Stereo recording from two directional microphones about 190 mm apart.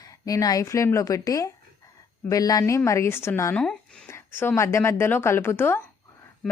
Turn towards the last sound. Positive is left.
turn(degrees=10)  # may be behind; listen again after turning